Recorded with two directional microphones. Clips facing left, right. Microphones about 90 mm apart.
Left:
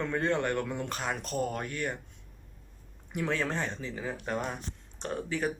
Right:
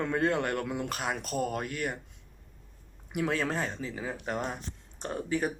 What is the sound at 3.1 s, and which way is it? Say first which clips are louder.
Speech: right 1 dB; 5° right (ahead or behind).